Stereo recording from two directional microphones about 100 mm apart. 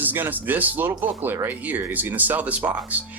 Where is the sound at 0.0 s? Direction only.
20° right (ahead or behind).